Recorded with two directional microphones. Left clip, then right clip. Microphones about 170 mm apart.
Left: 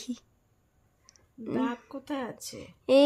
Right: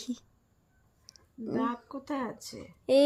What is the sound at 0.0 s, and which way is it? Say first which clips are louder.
Speech: even; centre (ahead or behind).